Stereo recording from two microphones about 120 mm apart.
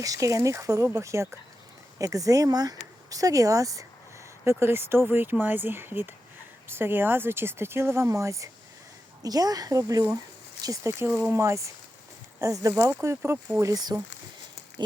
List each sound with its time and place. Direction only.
0.0 s speech: 30° right (ahead or behind)